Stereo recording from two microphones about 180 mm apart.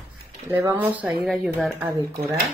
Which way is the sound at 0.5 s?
15° right (ahead or behind).